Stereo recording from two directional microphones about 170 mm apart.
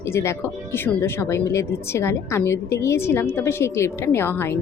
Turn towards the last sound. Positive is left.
turn(degrees=15)  # may be behind; listen again after turning